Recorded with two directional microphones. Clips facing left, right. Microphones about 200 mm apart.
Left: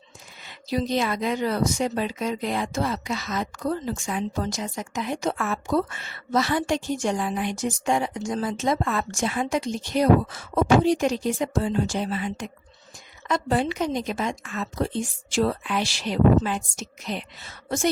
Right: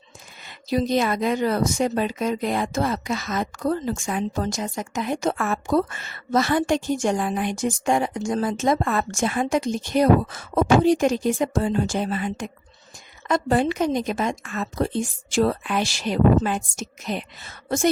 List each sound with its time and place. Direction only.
0.4 s a woman's voice: 50° right (ahead or behind)